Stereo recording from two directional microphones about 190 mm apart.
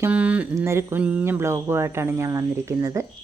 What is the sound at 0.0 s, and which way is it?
Speech, 10° right (ahead or behind).